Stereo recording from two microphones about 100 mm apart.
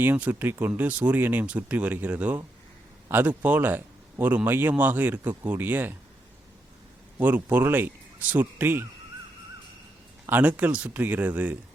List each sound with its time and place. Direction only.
0.0 s speech: 20° right (ahead or behind)
7.2 s speech: 20° right (ahead or behind)
10.2 s speech: 20° right (ahead or behind)